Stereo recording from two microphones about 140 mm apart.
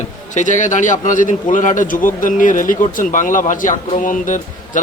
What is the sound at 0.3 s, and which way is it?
Speech, 65° left (ahead or behind).